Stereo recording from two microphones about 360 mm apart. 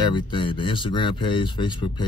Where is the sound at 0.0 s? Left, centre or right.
Centre.